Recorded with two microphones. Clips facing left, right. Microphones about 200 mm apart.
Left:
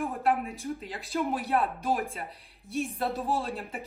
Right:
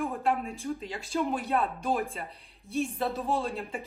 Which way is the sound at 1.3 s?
Centre (ahead or behind).